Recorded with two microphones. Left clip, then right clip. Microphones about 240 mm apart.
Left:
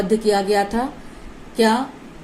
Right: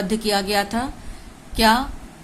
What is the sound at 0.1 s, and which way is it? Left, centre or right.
Speech, centre.